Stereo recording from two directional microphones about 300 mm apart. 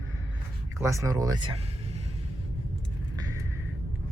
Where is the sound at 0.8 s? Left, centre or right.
Centre.